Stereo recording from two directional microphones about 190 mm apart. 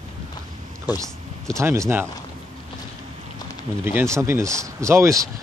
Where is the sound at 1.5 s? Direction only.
15° right (ahead or behind).